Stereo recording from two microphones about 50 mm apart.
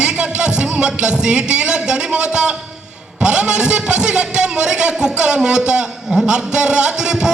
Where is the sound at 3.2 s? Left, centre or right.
Centre.